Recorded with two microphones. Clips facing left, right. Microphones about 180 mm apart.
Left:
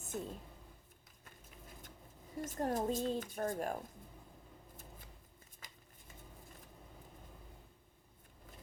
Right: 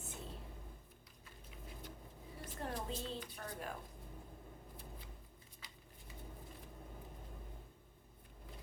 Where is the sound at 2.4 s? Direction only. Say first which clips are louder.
Left 9 dB; 45° left (ahead or behind).